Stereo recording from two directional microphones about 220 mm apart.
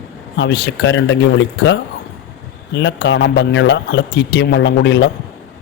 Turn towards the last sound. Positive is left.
turn(degrees=55)  # may be behind; listen again after turning